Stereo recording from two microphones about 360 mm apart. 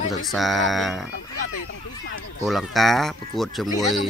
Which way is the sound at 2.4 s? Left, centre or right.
Centre.